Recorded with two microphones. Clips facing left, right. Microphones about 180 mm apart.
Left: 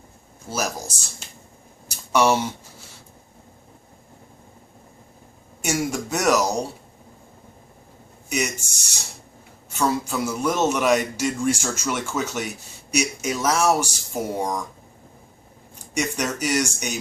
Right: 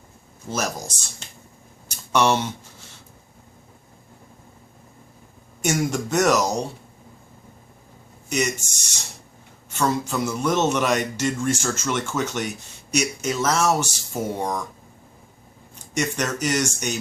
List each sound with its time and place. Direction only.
0.5 s a man's voice: 10° left (ahead or behind)
1.9 s a sound: 10° left (ahead or behind)
5.6 s a man's voice: 10° left (ahead or behind)
8.3 s a man's voice: 10° left (ahead or behind)
16.0 s a man's voice: 10° left (ahead or behind)